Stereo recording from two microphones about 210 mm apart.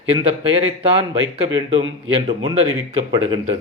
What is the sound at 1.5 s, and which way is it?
A man's voice, 25° right (ahead or behind).